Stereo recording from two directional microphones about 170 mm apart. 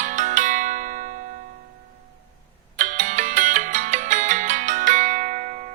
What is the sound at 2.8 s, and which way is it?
Music, 50° right (ahead or behind).